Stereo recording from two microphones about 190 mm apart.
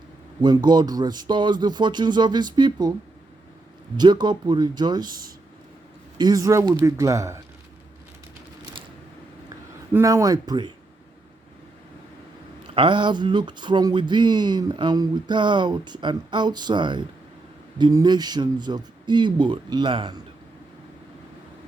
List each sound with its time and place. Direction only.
0.4 s speech: 20° right (ahead or behind)
3.9 s speech: 20° right (ahead or behind)
9.9 s speech: 15° right (ahead or behind)
12.6 s speech: 25° right (ahead or behind)